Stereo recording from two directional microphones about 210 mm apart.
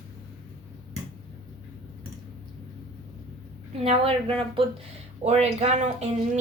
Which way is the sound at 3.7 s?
25° right (ahead or behind).